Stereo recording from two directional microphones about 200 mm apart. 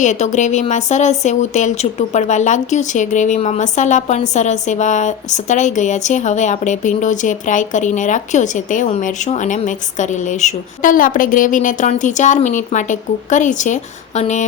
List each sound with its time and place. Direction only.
0.0 s speech: 35° left (ahead or behind)